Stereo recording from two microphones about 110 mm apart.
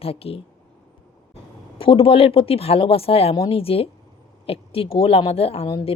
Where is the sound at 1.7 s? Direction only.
55° left (ahead or behind).